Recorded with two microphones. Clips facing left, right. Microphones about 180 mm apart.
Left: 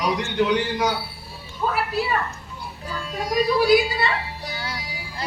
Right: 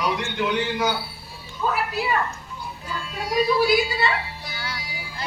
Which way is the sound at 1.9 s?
30° left (ahead or behind).